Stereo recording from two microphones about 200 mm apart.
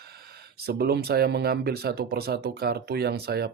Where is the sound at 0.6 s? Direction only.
50° right (ahead or behind).